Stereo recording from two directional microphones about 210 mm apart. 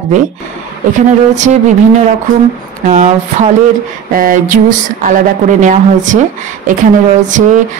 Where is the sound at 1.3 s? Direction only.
35° right (ahead or behind).